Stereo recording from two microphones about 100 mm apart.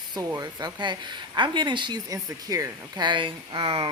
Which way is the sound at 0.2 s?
35° right (ahead or behind).